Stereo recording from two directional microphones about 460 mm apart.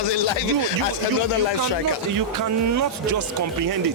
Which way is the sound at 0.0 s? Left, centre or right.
Left.